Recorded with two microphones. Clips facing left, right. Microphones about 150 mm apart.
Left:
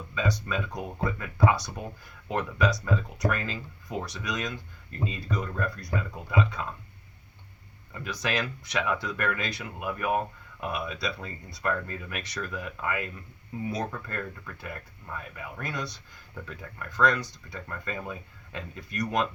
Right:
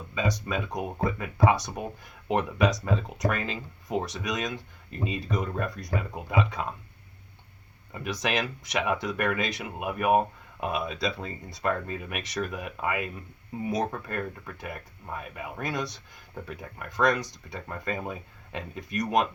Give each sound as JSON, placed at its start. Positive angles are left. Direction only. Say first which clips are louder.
{"t": 0.1, "sound": "speech", "louder": "right 1 dB", "side_deg": -20}
{"t": 7.9, "sound": "speech", "louder": "right 2 dB", "side_deg": -20}